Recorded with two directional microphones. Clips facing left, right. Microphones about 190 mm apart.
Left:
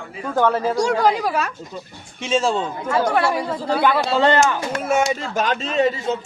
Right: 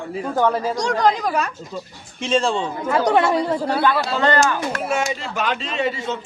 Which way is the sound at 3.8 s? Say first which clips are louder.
Left 5 dB; 20° left (ahead or behind).